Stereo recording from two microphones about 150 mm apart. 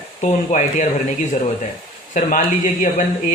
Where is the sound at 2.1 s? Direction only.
55° left (ahead or behind).